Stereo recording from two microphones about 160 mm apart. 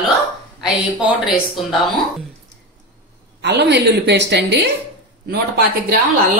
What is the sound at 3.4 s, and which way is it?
Speech, 90° right.